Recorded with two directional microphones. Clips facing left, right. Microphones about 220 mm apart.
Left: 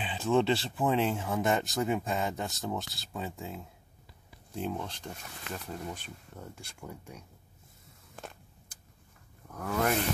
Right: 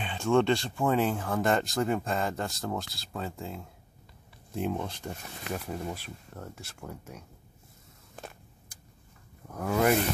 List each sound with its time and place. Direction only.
0.0 s speech: 5° left (ahead or behind)
4.6 s speech: 10° right (ahead or behind)
9.6 s speech: 10° right (ahead or behind)